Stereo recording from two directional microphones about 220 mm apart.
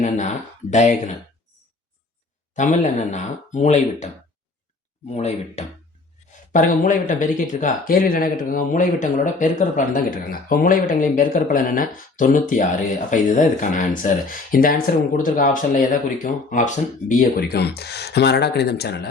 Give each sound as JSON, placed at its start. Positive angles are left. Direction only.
{"t": 0.0, "sound": "speech", "side_deg": 35}
{"t": 2.6, "sound": "speech", "side_deg": 35}